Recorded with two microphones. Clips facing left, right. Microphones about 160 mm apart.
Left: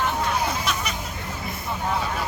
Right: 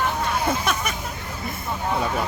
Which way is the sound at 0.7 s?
50° right (ahead or behind).